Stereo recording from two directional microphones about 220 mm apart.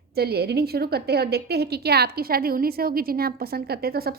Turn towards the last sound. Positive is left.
turn(degrees=-45)  # may be behind; listen again after turning